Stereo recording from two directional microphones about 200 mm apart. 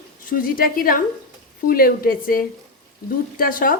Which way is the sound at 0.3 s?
45° left (ahead or behind).